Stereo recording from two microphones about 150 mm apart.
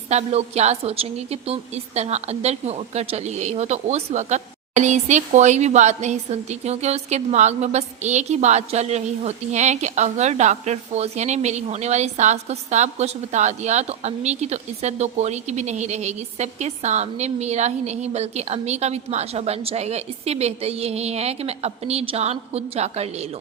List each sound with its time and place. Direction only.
0.1 s a woman's voice: 45° right (ahead or behind)